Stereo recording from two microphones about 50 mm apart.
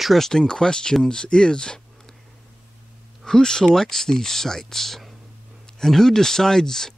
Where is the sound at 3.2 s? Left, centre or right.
Centre.